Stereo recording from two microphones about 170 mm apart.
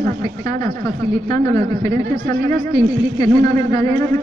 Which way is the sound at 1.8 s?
50° right (ahead or behind).